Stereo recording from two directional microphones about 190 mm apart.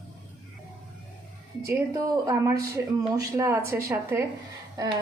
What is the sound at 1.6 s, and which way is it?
A woman's voice, 15° right (ahead or behind).